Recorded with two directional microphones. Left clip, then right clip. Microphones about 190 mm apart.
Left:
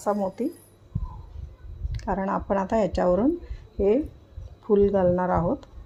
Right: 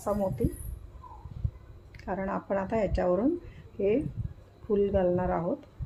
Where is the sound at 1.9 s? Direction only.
40° left (ahead or behind).